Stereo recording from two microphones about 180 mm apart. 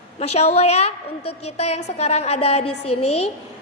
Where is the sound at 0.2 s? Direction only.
35° left (ahead or behind).